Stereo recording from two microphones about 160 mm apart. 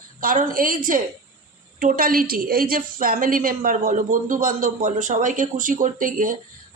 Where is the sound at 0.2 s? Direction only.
60° right (ahead or behind).